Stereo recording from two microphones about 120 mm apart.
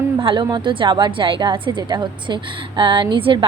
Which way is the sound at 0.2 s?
45° right (ahead or behind).